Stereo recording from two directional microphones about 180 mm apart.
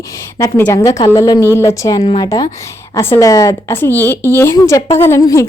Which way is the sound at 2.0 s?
30° left (ahead or behind).